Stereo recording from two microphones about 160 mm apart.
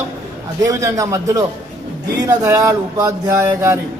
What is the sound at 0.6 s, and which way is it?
Speech, 20° right (ahead or behind).